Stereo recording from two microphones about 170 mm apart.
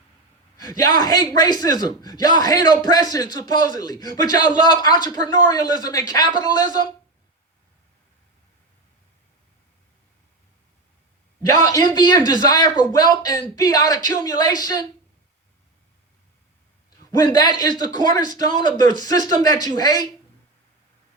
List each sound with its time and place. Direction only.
0.7 s speech: 25° left (ahead or behind)
11.5 s speech: 25° left (ahead or behind)
17.1 s a man's voice: 25° left (ahead or behind)